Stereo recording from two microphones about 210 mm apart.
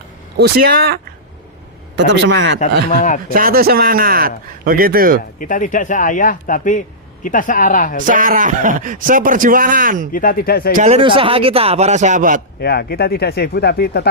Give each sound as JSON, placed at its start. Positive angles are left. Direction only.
{"t": 0.3, "sound": "a man's voice", "side_deg": -50}
{"t": 2.0, "sound": "a man's voice", "side_deg": -55}
{"t": 2.9, "sound": "a man's voice", "side_deg": 40}
{"t": 3.3, "sound": "a man's voice", "side_deg": -45}
{"t": 5.4, "sound": "a man's voice", "side_deg": 40}
{"t": 8.0, "sound": "a man's voice", "side_deg": -40}
{"t": 10.1, "sound": "speech", "side_deg": 40}
{"t": 10.8, "sound": "a man's voice", "side_deg": -30}
{"t": 12.5, "sound": "speech", "side_deg": 50}